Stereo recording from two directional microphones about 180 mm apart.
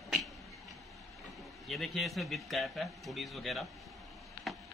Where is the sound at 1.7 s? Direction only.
Centre (ahead or behind).